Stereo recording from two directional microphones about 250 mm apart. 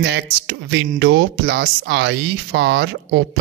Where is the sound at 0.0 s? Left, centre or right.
Right.